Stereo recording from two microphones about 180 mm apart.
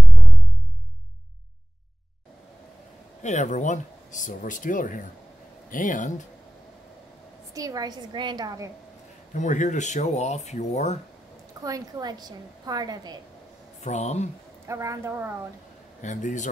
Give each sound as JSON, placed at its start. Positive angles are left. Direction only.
{"t": 3.2, "sound": "speech", "side_deg": 40}
{"t": 7.5, "sound": "a woman's voice", "side_deg": -20}
{"t": 9.3, "sound": "speech", "side_deg": 45}
{"t": 11.6, "sound": "a woman's voice", "side_deg": -20}
{"t": 13.7, "sound": "speech", "side_deg": 40}
{"t": 14.7, "sound": "a woman's voice", "side_deg": -15}
{"t": 16.0, "sound": "speech", "side_deg": 45}